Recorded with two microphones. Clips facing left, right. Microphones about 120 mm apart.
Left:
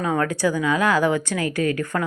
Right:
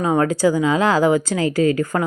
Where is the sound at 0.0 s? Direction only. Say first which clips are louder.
Right 5 dB; 25° right (ahead or behind).